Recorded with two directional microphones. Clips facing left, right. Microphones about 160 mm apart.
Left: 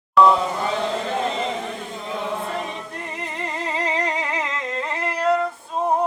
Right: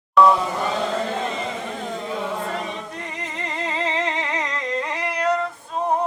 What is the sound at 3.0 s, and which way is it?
Music, 5° left (ahead or behind).